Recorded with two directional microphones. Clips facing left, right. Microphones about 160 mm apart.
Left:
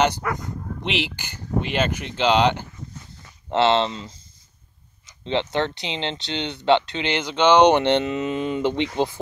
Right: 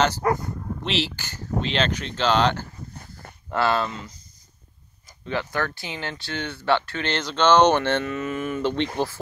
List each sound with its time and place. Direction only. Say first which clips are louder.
0.2 s speech: right 5 dB; 30° right (ahead or behind)
0.8 s speech: even; 15° left (ahead or behind)
3.0 s a sound: right 2 dB; 60° right (ahead or behind)
3.4 s speech: left 4 dB; 25° left (ahead or behind)